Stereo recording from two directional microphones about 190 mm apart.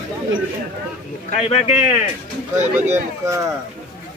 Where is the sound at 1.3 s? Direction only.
35° left (ahead or behind).